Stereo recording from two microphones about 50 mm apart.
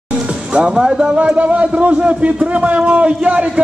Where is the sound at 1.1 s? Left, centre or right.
Right.